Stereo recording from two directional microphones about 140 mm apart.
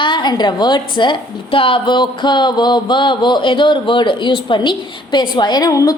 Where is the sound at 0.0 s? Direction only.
35° left (ahead or behind).